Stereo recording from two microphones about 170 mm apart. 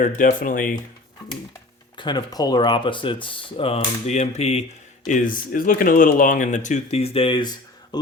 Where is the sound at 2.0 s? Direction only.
25° left (ahead or behind).